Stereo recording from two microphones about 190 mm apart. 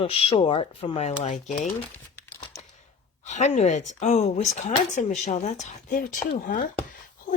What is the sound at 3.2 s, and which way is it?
Speech, 40° left (ahead or behind).